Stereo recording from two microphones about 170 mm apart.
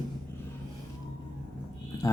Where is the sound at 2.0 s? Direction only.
15° left (ahead or behind).